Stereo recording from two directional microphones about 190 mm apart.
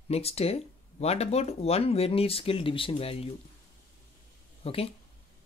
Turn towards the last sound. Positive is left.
turn(degrees=30)  # may be behind; listen again after turning